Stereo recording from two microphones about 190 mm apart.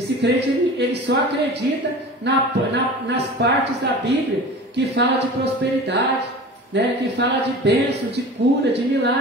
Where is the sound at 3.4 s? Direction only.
60° right (ahead or behind).